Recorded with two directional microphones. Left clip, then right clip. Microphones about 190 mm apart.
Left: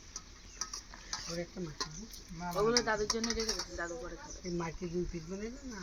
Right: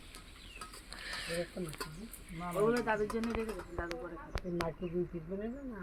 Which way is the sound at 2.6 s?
25° right (ahead or behind).